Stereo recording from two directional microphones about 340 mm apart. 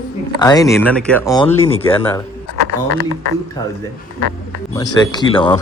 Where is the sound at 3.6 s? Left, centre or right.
Centre.